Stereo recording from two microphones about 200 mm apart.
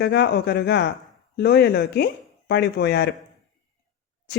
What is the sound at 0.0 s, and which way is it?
Speech, 55° left (ahead or behind).